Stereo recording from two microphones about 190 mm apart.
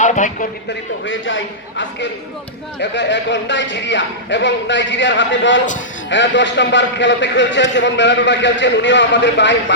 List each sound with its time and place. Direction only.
0.0 s speech: 40° left (ahead or behind)
1.0 s a man's voice: 90° left
2.9 s a man's voice: 70° left (ahead or behind)